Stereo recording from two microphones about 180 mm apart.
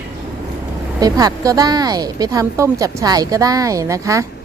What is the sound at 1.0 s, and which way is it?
Speech, 20° right (ahead or behind).